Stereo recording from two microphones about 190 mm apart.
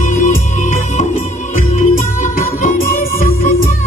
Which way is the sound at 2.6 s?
45° left (ahead or behind).